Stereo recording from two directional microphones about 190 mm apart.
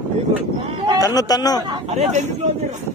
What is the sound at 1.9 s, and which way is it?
Speech, 40° right (ahead or behind).